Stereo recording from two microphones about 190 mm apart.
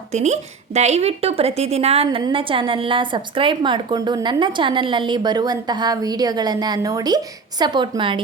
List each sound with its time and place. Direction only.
0.1 s a woman's voice: 35° right (ahead or behind)